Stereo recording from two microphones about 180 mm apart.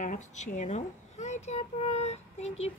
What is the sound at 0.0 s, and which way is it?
A child's voice, 45° left (ahead or behind).